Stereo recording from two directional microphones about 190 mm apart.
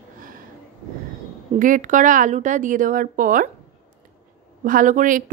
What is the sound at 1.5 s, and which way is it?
A woman's voice, 45° right (ahead or behind).